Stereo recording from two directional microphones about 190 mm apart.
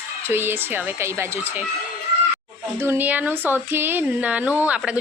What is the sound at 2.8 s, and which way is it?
Speech, 10° right (ahead or behind).